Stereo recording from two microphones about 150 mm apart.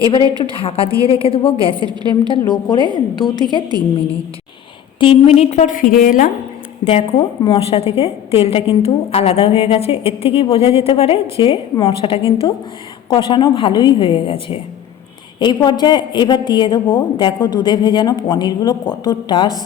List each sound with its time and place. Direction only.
0.1 s a woman's voice: 35° left (ahead or behind)
4.9 s a woman's voice: 40° left (ahead or behind); by 6.3 s 65° left (ahead or behind)
6.8 s a woman's voice: 40° left (ahead or behind)